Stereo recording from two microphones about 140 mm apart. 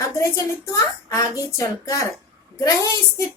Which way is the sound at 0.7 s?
20° left (ahead or behind).